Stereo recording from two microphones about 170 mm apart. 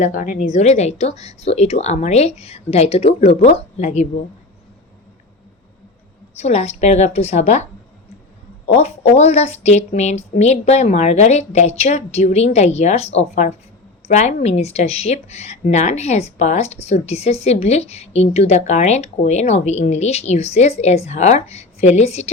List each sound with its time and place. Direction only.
0.0 s speech: 50° left (ahead or behind)
6.3 s speech: 40° left (ahead or behind)
8.7 s speech: 40° left (ahead or behind)